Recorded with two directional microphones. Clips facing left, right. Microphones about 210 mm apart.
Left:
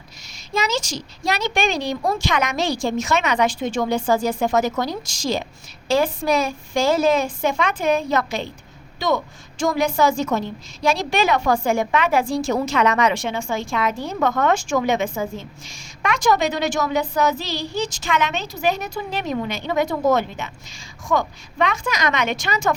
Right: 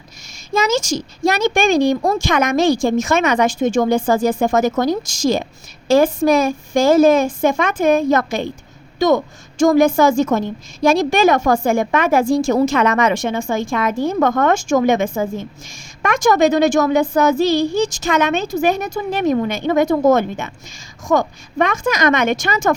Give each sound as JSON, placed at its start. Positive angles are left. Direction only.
{"t": 0.5, "sound": "a woman's voice", "side_deg": -50}